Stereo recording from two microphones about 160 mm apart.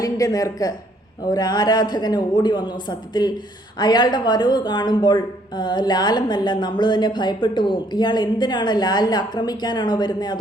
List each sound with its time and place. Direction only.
0.0 s speech: 20° left (ahead or behind)